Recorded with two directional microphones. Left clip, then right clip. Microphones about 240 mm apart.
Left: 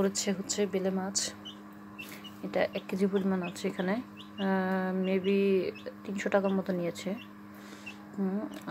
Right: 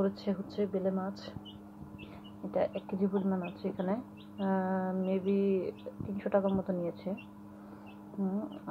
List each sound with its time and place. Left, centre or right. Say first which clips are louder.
0.0 s speech: left 3 dB; left
2.5 s speech: left 2 dB; left